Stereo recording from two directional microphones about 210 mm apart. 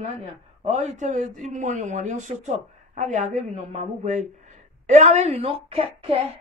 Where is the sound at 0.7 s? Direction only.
35° right (ahead or behind).